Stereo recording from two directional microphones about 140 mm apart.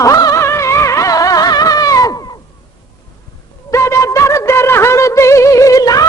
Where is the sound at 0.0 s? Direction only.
25° left (ahead or behind).